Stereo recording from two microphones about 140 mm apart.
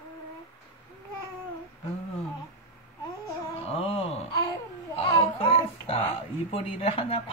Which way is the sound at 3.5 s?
45° left (ahead or behind).